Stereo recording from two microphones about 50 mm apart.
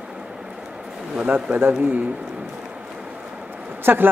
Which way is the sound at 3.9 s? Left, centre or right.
Right.